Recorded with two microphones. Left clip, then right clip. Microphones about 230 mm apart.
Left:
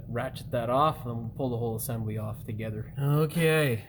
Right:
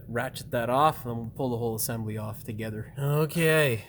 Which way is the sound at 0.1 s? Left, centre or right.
Right.